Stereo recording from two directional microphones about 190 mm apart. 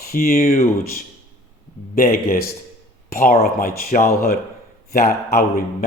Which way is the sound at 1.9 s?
50° left (ahead or behind).